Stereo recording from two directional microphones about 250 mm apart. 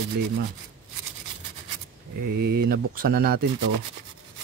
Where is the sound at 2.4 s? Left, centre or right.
Right.